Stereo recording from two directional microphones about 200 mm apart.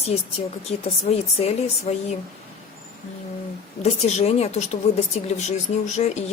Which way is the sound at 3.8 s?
35° left (ahead or behind).